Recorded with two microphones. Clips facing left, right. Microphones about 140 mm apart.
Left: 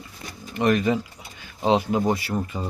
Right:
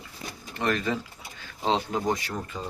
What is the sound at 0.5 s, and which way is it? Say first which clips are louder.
Speech: left 7 dB; 15° left (ahead or behind).